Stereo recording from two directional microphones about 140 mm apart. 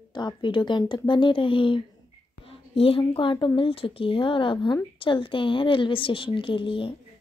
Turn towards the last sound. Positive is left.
turn(degrees=35)  # may be behind; listen again after turning